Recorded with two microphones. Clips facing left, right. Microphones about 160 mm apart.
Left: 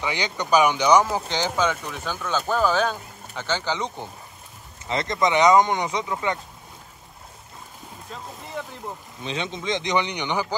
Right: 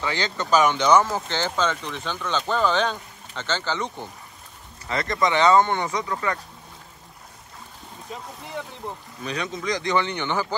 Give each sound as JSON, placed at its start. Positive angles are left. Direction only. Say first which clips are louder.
{"t": 0.0, "sound": "speech", "louder": "even", "side_deg": 15}
{"t": 8.6, "sound": "speech", "louder": "left 1 dB", "side_deg": 0}
{"t": 9.2, "sound": "speech", "louder": "even", "side_deg": 25}